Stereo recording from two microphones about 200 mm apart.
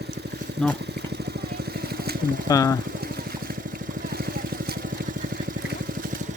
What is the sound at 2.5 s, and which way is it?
Speech, 15° left (ahead or behind).